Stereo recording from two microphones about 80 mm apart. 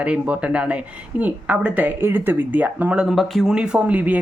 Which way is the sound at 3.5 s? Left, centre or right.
Centre.